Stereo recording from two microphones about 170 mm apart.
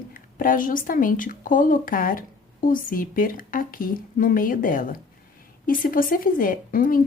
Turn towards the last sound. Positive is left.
turn(degrees=55)  # may be behind; listen again after turning